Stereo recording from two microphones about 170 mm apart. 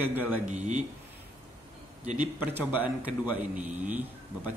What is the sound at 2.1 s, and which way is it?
A man's voice, 10° right (ahead or behind).